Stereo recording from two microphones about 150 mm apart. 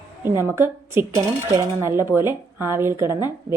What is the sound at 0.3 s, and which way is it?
A woman's voice, 15° right (ahead or behind).